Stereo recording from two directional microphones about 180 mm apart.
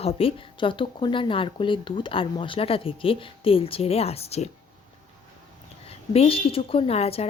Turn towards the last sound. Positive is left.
turn(degrees=35)  # may be behind; listen again after turning